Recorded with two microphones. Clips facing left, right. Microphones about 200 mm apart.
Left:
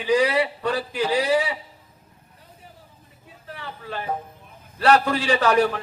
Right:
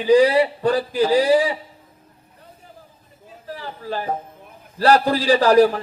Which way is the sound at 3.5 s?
35° right (ahead or behind).